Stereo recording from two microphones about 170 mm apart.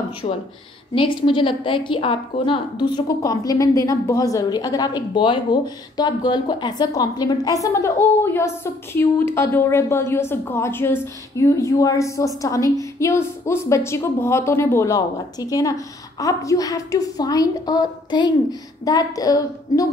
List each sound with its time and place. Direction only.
0.2 s a woman's voice: 40° left (ahead or behind); by 19.9 s 20° left (ahead or behind)